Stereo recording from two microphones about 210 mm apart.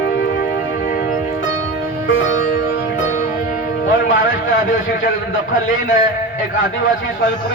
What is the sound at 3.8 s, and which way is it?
A man's voice, 40° left (ahead or behind).